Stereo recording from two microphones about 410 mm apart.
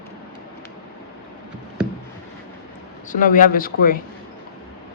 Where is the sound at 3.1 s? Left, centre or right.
Centre.